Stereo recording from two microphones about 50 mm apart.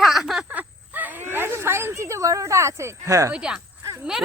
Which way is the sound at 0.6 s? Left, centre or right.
Right.